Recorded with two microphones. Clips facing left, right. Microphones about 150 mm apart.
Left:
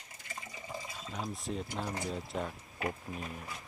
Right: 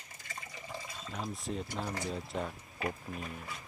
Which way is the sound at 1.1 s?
Centre (ahead or behind).